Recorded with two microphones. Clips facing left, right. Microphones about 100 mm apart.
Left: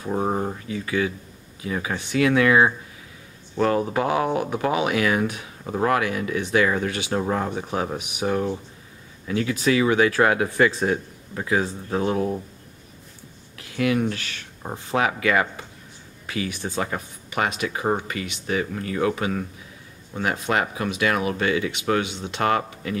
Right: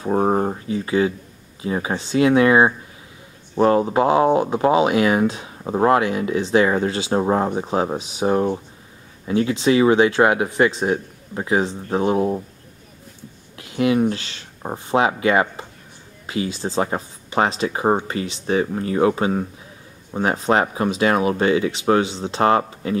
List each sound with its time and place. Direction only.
0.0 s speech: 35° right (ahead or behind)
13.6 s speech: 25° right (ahead or behind)